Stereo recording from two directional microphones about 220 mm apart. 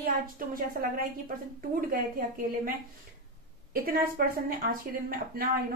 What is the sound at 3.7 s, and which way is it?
A woman's voice, 40° right (ahead or behind).